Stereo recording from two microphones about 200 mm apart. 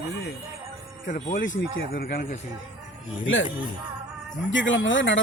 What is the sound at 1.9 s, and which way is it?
Speech, 45° left (ahead or behind).